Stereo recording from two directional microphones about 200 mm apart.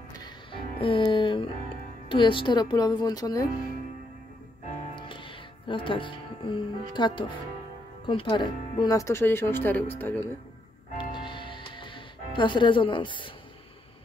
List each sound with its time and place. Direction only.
0.2 s music: 25° left (ahead or behind)
2.0 s a woman's voice: 25° left (ahead or behind)
4.9 s music: 25° left (ahead or behind)
8.0 s speech: 25° left (ahead or behind)
11.0 s music: 25° left (ahead or behind)